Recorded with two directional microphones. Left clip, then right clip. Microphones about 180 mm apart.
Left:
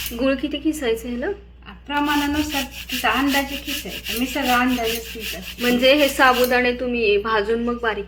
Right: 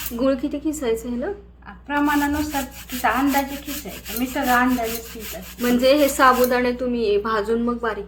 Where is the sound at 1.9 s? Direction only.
10° left (ahead or behind).